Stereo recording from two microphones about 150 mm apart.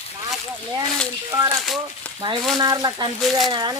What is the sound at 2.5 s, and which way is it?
Speech, 25° right (ahead or behind).